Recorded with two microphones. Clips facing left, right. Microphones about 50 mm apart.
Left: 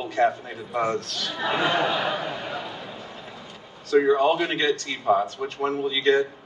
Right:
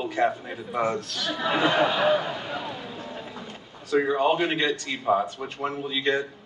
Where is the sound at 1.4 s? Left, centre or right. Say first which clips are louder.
Right 1 dB; centre.